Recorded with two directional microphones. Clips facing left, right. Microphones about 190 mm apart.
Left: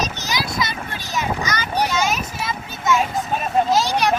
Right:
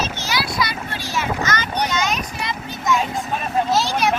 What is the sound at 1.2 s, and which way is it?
Vehicle, 10° left (ahead or behind).